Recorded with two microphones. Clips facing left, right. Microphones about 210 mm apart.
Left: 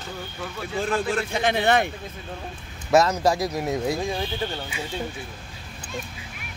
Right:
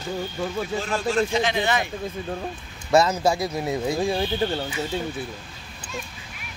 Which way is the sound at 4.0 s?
35° right (ahead or behind).